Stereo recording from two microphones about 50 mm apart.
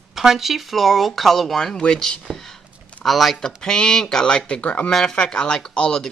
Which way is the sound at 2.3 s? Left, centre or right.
Centre.